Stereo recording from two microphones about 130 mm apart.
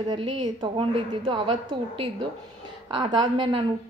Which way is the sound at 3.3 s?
40° right (ahead or behind).